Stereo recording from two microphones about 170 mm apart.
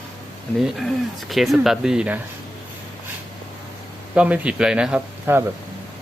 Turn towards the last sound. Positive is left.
turn(degrees=-10)  # may be behind; listen again after turning